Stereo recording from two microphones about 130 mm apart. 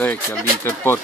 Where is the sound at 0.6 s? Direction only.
20° left (ahead or behind).